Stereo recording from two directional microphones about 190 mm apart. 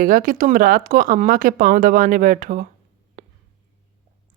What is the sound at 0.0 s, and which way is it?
A woman's voice, 45° right (ahead or behind).